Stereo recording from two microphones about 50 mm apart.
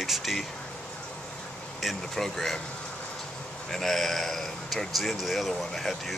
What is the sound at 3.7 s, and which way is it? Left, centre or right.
Speech, centre.